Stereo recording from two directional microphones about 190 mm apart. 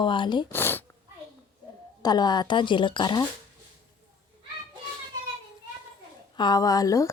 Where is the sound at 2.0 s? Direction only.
20° left (ahead or behind).